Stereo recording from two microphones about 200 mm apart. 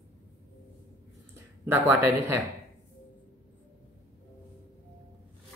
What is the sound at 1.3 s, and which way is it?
Speech, 10° right (ahead or behind).